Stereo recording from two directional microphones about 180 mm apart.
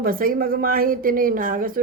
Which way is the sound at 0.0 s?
50° right (ahead or behind).